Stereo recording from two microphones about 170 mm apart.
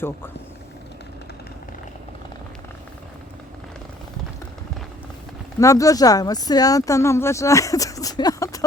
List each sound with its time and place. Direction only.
5.5 s speech: 20° left (ahead or behind)